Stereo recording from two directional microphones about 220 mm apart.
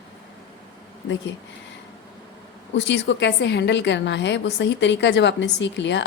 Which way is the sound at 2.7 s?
55° left (ahead or behind).